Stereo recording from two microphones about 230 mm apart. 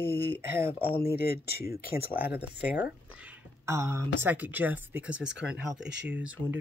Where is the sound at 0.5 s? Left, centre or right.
Centre.